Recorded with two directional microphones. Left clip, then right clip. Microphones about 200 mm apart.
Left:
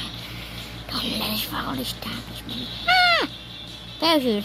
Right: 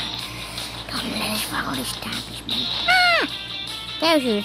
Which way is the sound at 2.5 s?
50° right (ahead or behind).